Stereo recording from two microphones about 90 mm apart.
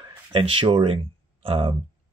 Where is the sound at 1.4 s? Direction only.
90° right.